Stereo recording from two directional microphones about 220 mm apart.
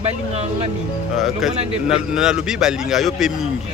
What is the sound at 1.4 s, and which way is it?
A man's voice, centre (ahead or behind).